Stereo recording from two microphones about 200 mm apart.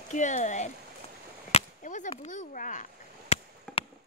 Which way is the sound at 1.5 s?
40° left (ahead or behind).